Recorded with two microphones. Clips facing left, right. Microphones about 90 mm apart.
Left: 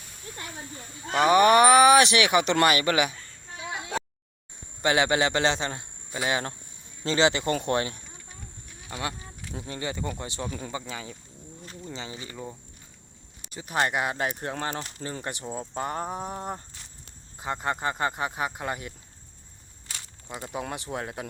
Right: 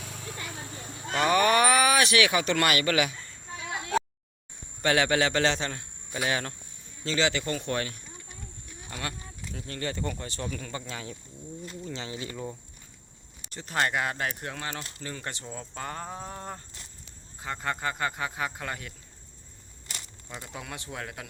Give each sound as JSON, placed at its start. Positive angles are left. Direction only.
{"t": 0.0, "sound": "a sound", "side_deg": -90}
{"t": 1.1, "sound": "speech", "side_deg": 15}
{"t": 3.7, "sound": "a sound", "side_deg": 20}
{"t": 4.8, "sound": "a man's voice", "side_deg": 15}
{"t": 7.0, "sound": "speech", "side_deg": 30}
{"t": 9.0, "sound": "speech", "side_deg": 20}
{"t": 10.8, "sound": "speech", "side_deg": 5}
{"t": 20.7, "sound": "speech", "side_deg": 25}